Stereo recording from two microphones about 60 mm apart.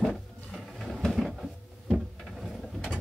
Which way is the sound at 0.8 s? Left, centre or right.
Centre.